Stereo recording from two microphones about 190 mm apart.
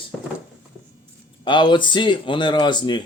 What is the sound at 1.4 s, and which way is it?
Speech, 25° left (ahead or behind).